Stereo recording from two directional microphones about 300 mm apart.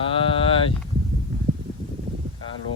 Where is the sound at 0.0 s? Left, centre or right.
Centre.